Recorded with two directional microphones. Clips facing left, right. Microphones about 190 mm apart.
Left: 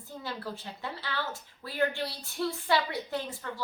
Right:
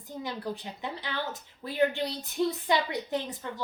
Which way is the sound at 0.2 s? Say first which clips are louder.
Right 4 dB; 15° right (ahead or behind).